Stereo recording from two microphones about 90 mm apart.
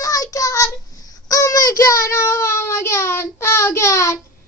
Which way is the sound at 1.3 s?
40° left (ahead or behind).